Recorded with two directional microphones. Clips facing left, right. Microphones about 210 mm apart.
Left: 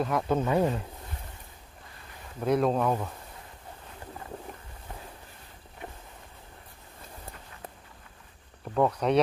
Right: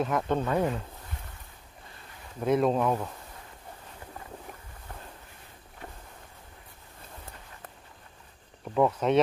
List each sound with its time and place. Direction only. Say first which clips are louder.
0.0 s speech: left 1 dB; centre (ahead or behind)
2.4 s speech: even; centre (ahead or behind)
8.7 s speech: right 1 dB; centre (ahead or behind)